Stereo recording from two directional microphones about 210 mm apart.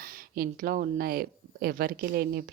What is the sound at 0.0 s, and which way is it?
A woman's voice, 45° right (ahead or behind).